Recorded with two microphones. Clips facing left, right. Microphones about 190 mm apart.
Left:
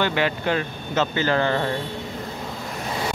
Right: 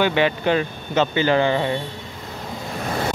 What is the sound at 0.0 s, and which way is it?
Speech, 20° right (ahead or behind).